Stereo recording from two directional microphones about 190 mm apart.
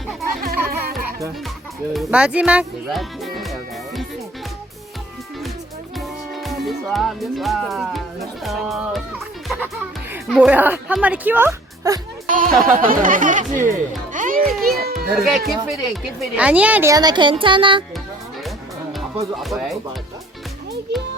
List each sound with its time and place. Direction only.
0.4 s music: 55° right (ahead or behind)
1.9 s speech: 5° right (ahead or behind)
6.0 s music: centre (ahead or behind)
10.2 s a woman's voice: 5° right (ahead or behind)
12.3 s speech: 45° right (ahead or behind)
14.1 s music: 45° right (ahead or behind)
15.1 s a woman's voice: centre (ahead or behind); by 17.8 s 25° right (ahead or behind)
19.4 s speech: centre (ahead or behind)